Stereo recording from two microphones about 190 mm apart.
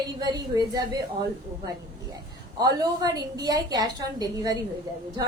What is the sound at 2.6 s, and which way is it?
A woman's voice, 20° right (ahead or behind).